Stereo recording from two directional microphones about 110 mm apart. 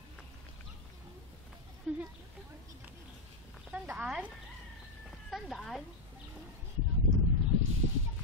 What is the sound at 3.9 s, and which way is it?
Speech, 10° right (ahead or behind).